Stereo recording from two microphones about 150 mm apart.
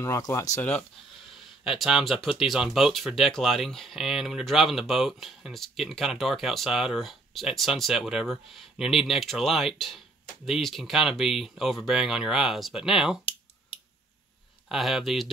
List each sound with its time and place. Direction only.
0.0 s speech: 20° left (ahead or behind)
1.6 s speech: 5° right (ahead or behind)
14.7 s speech: centre (ahead or behind)